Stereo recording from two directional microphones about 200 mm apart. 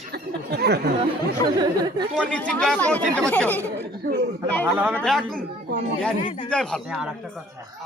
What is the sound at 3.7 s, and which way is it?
Speech, 50° right (ahead or behind).